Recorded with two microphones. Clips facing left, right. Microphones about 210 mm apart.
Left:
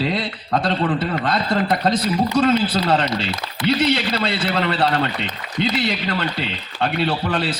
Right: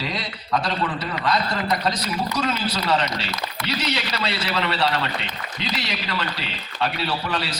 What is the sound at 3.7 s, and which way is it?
A man's voice, 50° left (ahead or behind).